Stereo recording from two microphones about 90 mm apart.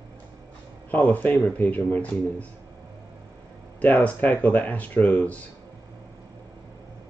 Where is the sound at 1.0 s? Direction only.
15° left (ahead or behind).